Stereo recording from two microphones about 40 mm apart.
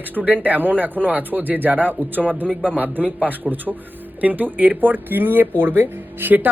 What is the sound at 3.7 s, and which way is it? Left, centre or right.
Speech, centre.